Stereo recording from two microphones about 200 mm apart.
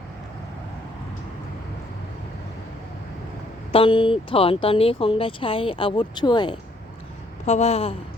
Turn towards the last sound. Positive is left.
turn(degrees=30)  # may be behind; listen again after turning